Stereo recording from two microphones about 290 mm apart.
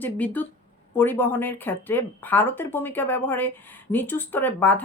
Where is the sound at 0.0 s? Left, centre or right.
Centre.